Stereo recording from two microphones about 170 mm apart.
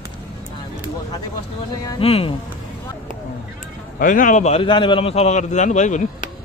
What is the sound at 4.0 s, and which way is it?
A man's voice, 55° left (ahead or behind).